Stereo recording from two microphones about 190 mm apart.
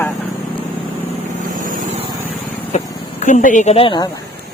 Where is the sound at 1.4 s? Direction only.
45° right (ahead or behind).